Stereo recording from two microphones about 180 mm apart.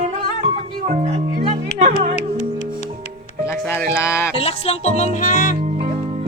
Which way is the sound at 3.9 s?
15° left (ahead or behind).